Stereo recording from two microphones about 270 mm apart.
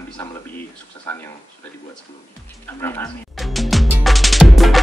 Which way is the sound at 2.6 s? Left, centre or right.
Centre.